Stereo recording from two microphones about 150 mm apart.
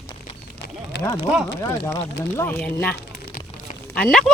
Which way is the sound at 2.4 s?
15° left (ahead or behind).